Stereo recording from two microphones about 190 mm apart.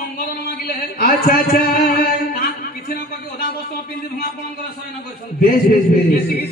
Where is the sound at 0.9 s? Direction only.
50° left (ahead or behind).